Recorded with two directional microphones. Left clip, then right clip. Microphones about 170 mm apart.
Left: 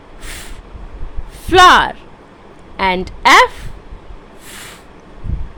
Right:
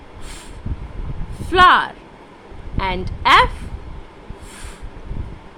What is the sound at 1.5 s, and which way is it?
Speech, 40° left (ahead or behind).